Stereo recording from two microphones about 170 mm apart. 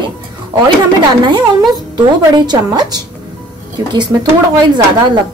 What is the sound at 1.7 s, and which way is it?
A woman's voice, 25° right (ahead or behind).